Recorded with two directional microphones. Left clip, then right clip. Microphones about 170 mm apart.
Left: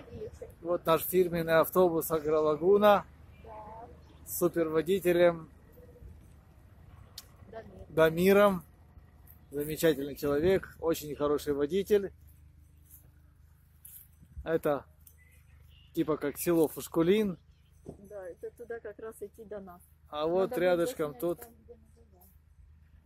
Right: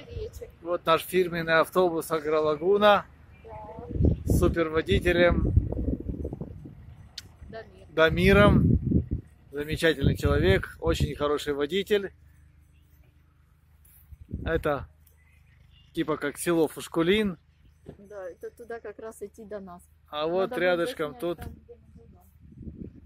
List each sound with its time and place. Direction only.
0.7 s speech: 10° left (ahead or behind)
4.4 s speech: 10° left (ahead or behind)
7.2 s vehicle: 10° left (ahead or behind)
7.9 s speech: 5° left (ahead or behind)
9.6 s speech: centre (ahead or behind)
14.4 s speech: 10° left (ahead or behind)
15.9 s speech: 5° left (ahead or behind)
18.1 s speech: 50° right (ahead or behind)
20.1 s speech: 10° left (ahead or behind)